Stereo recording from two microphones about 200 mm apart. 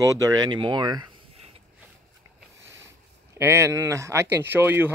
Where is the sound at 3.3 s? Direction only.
15° right (ahead or behind).